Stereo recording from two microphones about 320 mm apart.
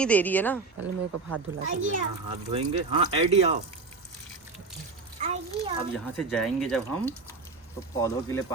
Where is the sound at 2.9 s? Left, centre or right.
Centre.